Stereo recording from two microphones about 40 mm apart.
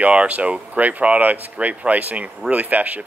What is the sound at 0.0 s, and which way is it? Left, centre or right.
Speech, right.